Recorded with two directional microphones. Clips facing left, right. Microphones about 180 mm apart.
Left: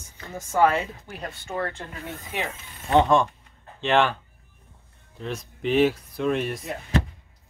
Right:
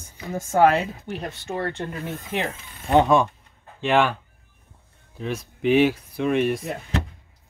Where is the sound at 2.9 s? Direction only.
10° right (ahead or behind).